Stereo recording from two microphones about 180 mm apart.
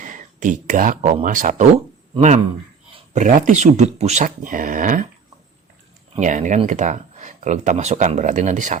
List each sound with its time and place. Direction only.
0.0 s speech: 45° right (ahead or behind)
2.9 s speech: 40° right (ahead or behind)
6.1 s speech: 45° right (ahead or behind)